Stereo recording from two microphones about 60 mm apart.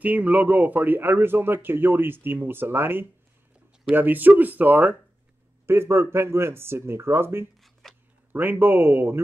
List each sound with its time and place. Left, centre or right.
0.0 s speech: right
5.7 s speech: right
7.8 s a sound: centre
8.3 s speech: right